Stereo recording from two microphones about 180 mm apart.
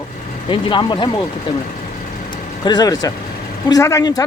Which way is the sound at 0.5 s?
25° left (ahead or behind).